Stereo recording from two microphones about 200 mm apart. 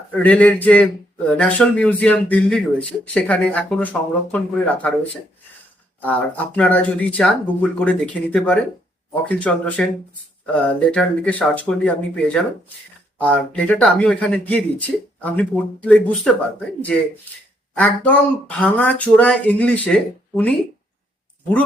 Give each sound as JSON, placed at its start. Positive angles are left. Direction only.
{"t": 0.2, "sound": "speech", "side_deg": 5}
{"t": 6.0, "sound": "speech", "side_deg": 10}
{"t": 17.7, "sound": "speech", "side_deg": 10}